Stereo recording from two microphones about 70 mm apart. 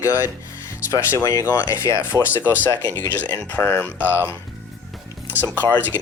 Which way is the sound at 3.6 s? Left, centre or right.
Left.